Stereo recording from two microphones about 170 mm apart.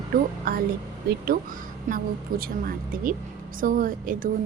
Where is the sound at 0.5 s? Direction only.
60° right (ahead or behind).